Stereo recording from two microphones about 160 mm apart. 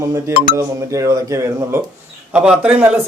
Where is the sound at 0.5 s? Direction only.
20° right (ahead or behind).